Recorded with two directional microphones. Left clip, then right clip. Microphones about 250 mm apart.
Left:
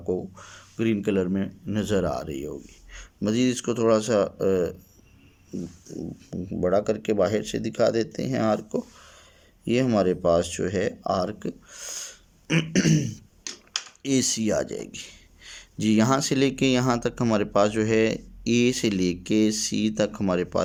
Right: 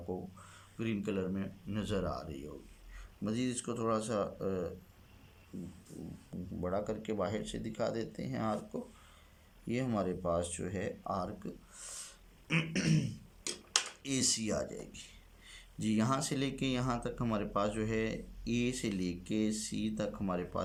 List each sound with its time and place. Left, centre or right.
0.1 s speech: left
6.3 s speech: left